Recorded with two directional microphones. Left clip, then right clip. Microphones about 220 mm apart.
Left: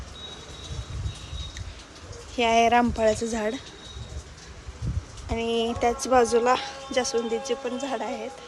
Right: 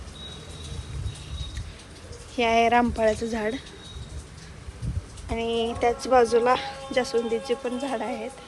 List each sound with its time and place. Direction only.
2.3 s speech: 15° left (ahead or behind)
3.2 s a woman's voice: 20° left (ahead or behind)
5.3 s speech: 15° left (ahead or behind)